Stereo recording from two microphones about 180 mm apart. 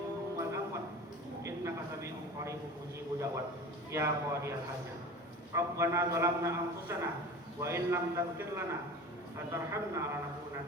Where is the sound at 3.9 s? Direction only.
15° right (ahead or behind).